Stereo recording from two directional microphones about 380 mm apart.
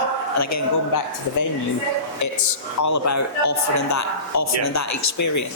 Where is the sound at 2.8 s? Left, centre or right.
Left.